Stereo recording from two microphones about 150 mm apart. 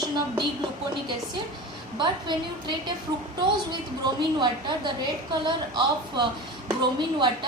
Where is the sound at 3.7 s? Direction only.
30° right (ahead or behind).